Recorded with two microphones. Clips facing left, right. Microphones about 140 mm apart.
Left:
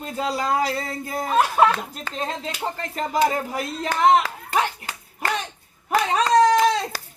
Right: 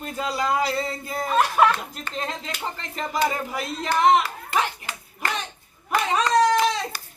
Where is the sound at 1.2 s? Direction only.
25° left (ahead or behind).